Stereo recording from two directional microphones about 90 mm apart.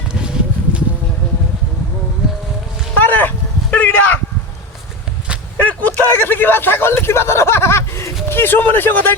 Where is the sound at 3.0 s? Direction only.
20° left (ahead or behind).